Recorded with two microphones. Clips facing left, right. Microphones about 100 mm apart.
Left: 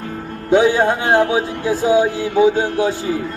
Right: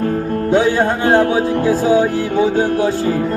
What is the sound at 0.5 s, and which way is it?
Music, 15° left (ahead or behind).